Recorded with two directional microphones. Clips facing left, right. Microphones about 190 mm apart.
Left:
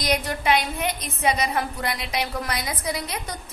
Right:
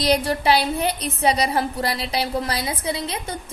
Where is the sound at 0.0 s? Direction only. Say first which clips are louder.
Right 5 dB; 30° right (ahead or behind).